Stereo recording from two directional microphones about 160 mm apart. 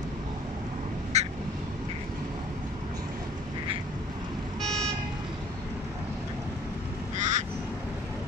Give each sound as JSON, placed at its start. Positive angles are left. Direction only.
{"t": 1.1, "sound": "duck", "side_deg": -45}
{"t": 4.6, "sound": "vehicle", "side_deg": 5}
{"t": 7.2, "sound": "quack", "side_deg": -50}